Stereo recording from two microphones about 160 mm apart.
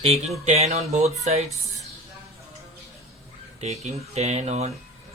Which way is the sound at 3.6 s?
45° right (ahead or behind).